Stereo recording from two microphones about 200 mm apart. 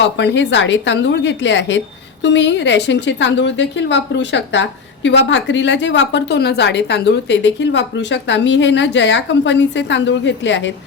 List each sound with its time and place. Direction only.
0.0 s a woman's voice: 65° left (ahead or behind)